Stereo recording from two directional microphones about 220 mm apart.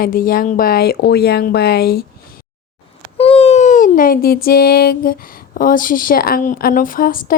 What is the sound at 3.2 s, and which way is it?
Speech, 25° left (ahead or behind).